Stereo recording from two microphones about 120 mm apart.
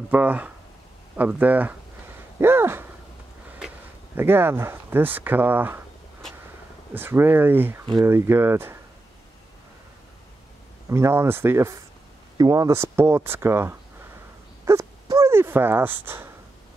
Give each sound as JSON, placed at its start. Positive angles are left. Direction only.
{"t": 0.1, "sound": "speech", "side_deg": -15}
{"t": 4.1, "sound": "speech", "side_deg": -20}
{"t": 6.9, "sound": "speech", "side_deg": -20}
{"t": 10.9, "sound": "speech", "side_deg": -20}
{"t": 14.6, "sound": "a sound", "side_deg": -25}